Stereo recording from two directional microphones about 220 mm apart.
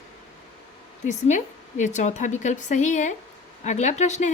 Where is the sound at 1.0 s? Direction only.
35° left (ahead or behind).